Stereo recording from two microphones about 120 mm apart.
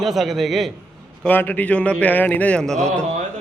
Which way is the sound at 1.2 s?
15° left (ahead or behind).